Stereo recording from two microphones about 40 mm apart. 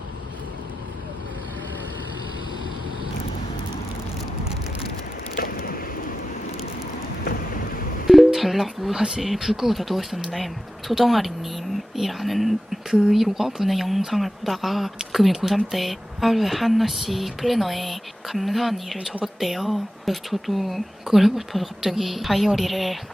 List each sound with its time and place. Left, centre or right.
8.0 s music: centre
9.0 s speech: centre
9.2 s speech: centre